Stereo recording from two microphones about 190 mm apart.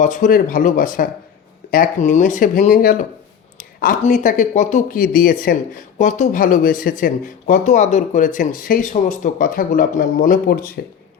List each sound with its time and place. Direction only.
0.0 s speech: 45° left (ahead or behind)